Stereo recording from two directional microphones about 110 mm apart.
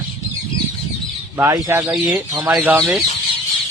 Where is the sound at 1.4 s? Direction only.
30° right (ahead or behind).